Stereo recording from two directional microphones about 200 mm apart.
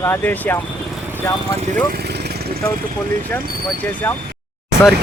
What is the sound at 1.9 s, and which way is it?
Vehicle, 55° right (ahead or behind).